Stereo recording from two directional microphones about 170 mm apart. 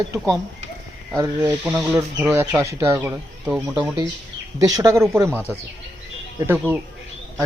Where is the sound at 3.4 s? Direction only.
Centre (ahead or behind).